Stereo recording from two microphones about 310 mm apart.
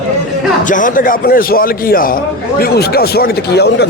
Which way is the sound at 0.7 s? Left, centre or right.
Left.